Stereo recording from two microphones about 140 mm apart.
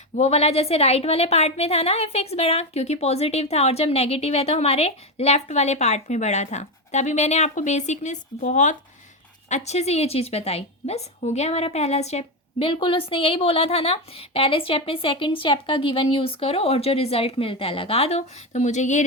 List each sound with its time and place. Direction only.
0.2 s a woman's voice: 50° left (ahead or behind)